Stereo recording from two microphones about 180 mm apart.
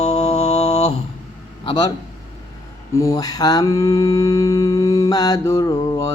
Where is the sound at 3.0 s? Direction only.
20° left (ahead or behind).